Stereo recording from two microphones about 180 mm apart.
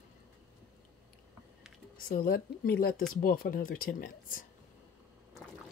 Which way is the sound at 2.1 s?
55° left (ahead or behind).